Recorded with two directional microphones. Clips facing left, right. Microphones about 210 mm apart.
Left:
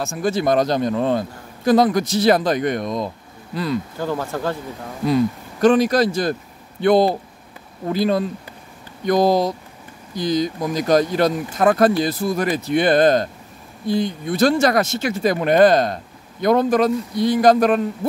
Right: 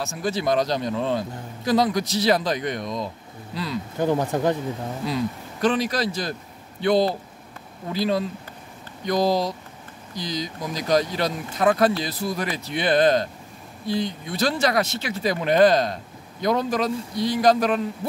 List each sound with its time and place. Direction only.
0.0 s speech: 50° left (ahead or behind)
4.0 s speech: 20° right (ahead or behind)
5.0 s speech: 50° left (ahead or behind)